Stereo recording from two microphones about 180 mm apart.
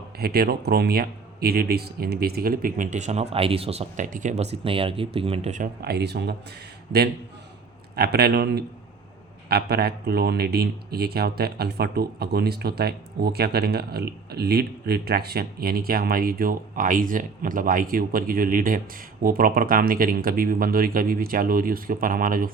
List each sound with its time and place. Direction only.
0.2 s speech: 60° right (ahead or behind); by 5.6 s 40° right (ahead or behind)
5.8 s speech: 65° right (ahead or behind)
7.9 s speech: 60° right (ahead or behind)